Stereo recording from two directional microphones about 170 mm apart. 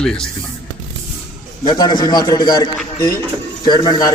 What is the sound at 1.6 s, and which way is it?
A man's voice, 25° left (ahead or behind).